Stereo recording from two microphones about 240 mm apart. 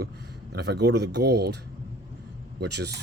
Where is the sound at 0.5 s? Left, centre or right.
Right.